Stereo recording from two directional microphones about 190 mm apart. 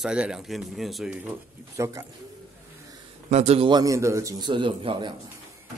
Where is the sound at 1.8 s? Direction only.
15° right (ahead or behind).